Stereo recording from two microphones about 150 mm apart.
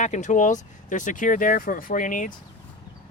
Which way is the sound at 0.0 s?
55° left (ahead or behind).